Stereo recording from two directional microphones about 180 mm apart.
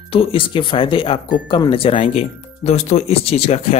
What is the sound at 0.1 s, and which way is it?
Speech, 30° left (ahead or behind).